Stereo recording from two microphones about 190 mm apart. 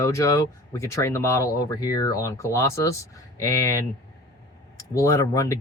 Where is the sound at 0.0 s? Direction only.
15° left (ahead or behind).